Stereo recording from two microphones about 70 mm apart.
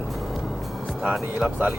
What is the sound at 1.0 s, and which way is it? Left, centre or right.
Speech, centre.